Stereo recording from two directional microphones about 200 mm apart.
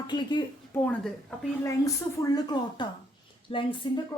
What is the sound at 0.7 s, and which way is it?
A woman's voice, 10° left (ahead or behind).